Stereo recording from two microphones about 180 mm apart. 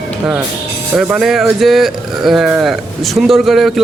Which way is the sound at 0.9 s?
Centre (ahead or behind).